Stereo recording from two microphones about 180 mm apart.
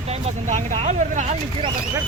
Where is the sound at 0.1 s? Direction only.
40° right (ahead or behind).